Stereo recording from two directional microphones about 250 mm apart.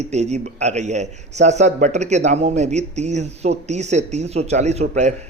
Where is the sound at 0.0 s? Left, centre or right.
Right.